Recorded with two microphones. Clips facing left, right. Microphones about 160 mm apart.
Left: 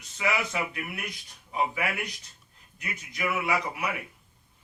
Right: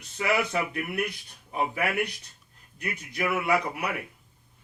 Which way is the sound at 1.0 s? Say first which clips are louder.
Right 4 dB; 45° right (ahead or behind).